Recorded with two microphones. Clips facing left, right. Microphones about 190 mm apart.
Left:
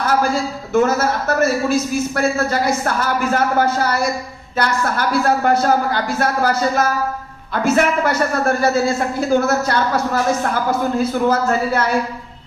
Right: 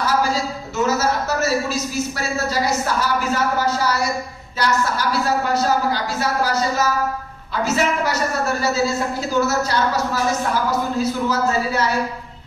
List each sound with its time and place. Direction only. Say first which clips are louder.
0.0 s a man's voice: left 2 dB; 55° left (ahead or behind)